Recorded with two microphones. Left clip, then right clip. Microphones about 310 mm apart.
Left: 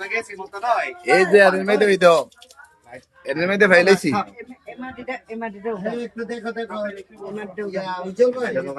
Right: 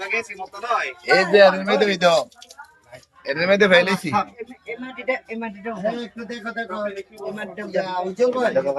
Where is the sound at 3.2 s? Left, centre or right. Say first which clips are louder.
Even; centre.